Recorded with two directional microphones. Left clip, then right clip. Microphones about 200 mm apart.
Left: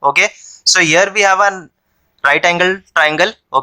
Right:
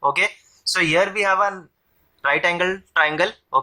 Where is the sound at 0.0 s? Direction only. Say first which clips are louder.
Left 7 dB; 35° left (ahead or behind).